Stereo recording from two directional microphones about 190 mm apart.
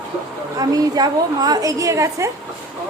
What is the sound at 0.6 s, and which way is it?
A woman's voice, 20° right (ahead or behind).